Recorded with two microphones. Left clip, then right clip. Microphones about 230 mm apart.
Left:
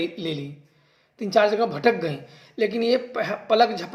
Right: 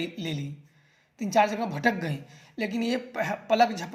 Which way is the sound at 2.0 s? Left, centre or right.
Right.